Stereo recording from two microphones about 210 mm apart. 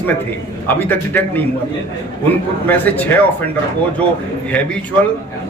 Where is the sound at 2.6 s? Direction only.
10° left (ahead or behind).